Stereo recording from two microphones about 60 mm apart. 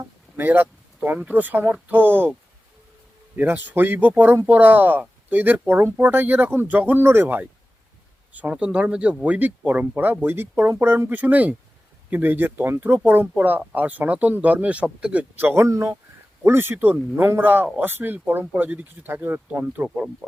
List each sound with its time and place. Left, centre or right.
0.3 s speech: right
3.3 s speech: right
8.3 s speech: right
15.4 s speech: right
15.6 s speech: right
16.4 s speech: right